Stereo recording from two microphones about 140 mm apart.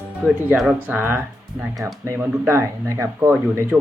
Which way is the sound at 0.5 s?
Centre (ahead or behind).